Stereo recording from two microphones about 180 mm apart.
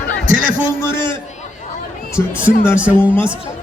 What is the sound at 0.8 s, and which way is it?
Speech, 15° left (ahead or behind).